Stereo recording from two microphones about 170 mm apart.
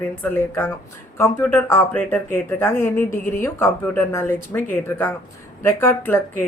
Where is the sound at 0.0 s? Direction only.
10° left (ahead or behind).